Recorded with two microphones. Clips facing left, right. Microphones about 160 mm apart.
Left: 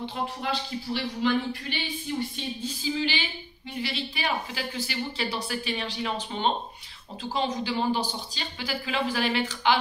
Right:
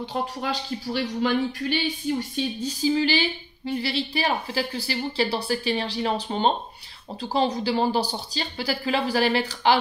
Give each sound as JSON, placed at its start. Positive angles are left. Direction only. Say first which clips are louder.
{"t": 1.2, "sound": "speech", "louder": "right 1 dB", "side_deg": -40}